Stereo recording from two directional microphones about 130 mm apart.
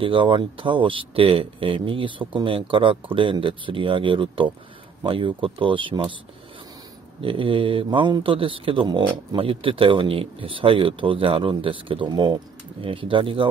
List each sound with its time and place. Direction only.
0.0 s speech: 40° right (ahead or behind)
7.2 s speech: 45° right (ahead or behind)